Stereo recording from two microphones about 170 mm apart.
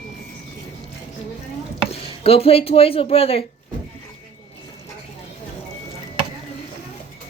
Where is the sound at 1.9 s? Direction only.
35° left (ahead or behind).